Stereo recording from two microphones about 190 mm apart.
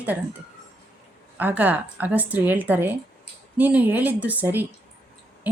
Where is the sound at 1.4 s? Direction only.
10° right (ahead or behind).